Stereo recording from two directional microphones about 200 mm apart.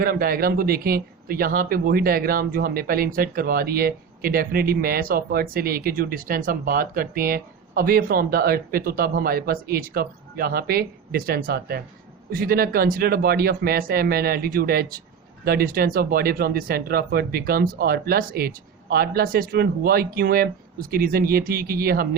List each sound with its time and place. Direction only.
0.0 s a man's voice: 45° right (ahead or behind)